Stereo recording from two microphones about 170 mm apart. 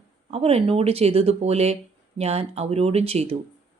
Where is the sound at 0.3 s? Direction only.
35° right (ahead or behind).